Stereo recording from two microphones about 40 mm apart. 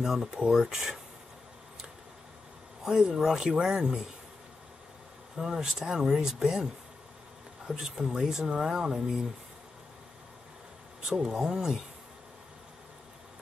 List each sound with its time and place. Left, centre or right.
0.0 s speech: centre
2.8 s speech: centre
5.4 s speech: centre
7.8 s speech: centre
11.0 s speech: centre